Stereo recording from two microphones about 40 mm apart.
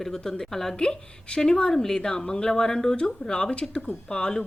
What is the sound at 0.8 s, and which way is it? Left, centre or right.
A woman's voice, centre.